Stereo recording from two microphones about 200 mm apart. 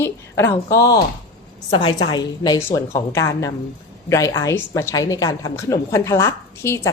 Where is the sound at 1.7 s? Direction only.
25° left (ahead or behind).